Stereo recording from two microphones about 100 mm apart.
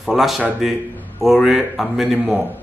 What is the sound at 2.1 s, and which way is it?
Speech, 15° right (ahead or behind).